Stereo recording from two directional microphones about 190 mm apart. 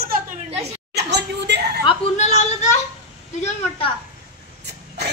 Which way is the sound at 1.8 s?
35° left (ahead or behind).